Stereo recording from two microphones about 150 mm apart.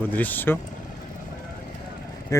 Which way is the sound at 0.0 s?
10° left (ahead or behind).